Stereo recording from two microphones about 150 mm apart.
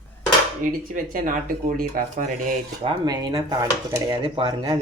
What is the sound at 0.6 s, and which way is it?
Speech, 65° right (ahead or behind).